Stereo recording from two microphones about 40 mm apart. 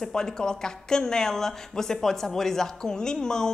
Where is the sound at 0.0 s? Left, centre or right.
Centre.